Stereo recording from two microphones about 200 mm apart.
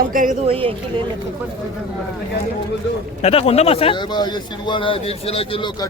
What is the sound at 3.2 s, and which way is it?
A man's voice, 30° left (ahead or behind).